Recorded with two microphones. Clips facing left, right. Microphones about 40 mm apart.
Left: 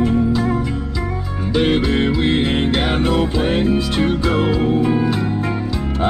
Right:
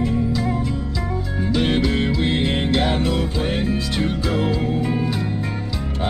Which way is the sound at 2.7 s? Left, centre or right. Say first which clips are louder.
Left 2 dB; left.